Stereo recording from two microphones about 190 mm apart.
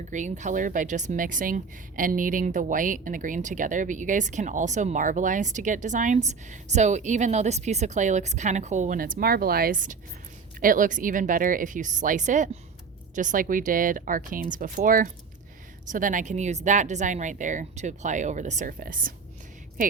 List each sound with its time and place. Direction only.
0.1 s speech: 40° right (ahead or behind)